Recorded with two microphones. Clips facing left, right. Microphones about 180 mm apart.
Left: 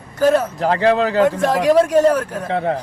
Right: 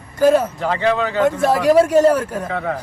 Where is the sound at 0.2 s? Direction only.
10° right (ahead or behind).